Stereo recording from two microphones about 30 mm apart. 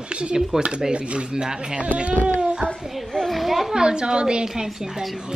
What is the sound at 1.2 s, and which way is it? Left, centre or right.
Speech, right.